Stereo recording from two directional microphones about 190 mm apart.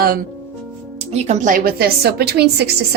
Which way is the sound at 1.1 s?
35° right (ahead or behind).